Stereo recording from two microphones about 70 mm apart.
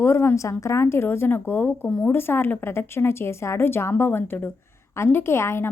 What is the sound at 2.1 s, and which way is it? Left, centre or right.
A woman's voice, left.